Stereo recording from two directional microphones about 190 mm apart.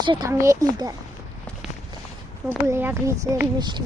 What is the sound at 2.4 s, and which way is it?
Speech, 10° right (ahead or behind).